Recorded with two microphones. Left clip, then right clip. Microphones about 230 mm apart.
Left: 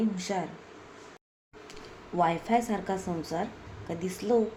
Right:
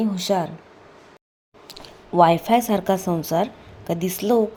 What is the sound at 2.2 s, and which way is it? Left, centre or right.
Speech, right.